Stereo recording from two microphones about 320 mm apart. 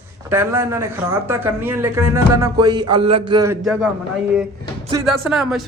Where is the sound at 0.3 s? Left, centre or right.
Centre.